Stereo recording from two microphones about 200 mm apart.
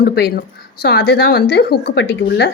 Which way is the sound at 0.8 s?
55° left (ahead or behind).